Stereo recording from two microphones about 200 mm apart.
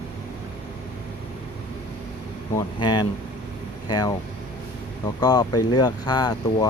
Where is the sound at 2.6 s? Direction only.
20° left (ahead or behind).